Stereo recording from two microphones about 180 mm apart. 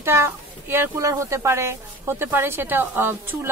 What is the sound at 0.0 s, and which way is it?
Speech, 15° right (ahead or behind).